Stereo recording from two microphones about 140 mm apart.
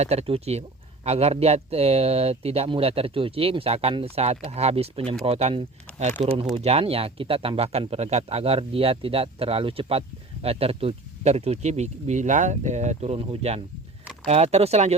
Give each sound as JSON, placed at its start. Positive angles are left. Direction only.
{"t": 0.0, "sound": "speech", "side_deg": -50}
{"t": 6.2, "sound": "speech", "side_deg": -45}